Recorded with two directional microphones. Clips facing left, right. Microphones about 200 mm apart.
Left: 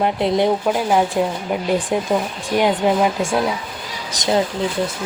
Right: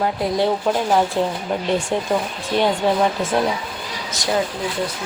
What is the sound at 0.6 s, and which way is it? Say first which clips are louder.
Speech: left 1 dB; 5° left (ahead or behind).